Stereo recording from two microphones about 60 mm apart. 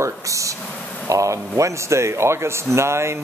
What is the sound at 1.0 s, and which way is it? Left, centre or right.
Speech, right.